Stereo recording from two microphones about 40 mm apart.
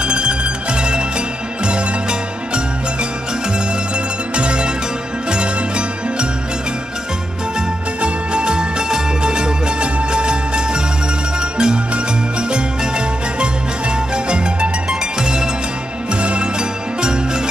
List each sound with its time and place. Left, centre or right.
0.0 s music: right
8.0 s music: right
16.1 s music: right